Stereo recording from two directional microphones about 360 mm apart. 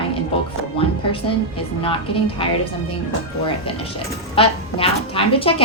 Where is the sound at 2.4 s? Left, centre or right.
Centre.